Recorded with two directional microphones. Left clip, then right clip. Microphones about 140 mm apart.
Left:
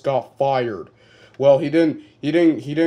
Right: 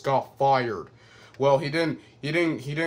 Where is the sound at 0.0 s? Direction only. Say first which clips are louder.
Left 3 dB; 10° left (ahead or behind).